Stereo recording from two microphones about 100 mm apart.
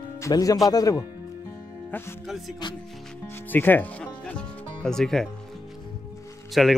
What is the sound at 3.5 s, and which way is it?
Music, 20° left (ahead or behind).